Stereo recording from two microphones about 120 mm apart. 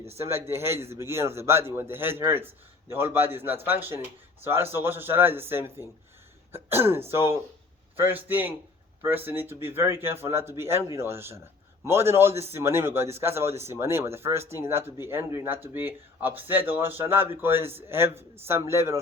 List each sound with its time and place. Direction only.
0.3 s a man's voice: 20° right (ahead or behind)